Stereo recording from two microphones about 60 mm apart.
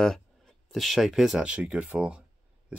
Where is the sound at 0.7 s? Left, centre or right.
Centre.